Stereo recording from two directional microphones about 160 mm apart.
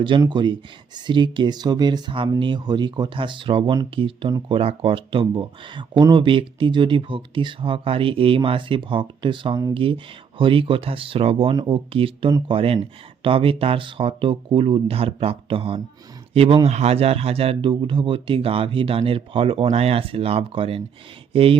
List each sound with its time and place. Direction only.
0.2 s speech: 30° right (ahead or behind)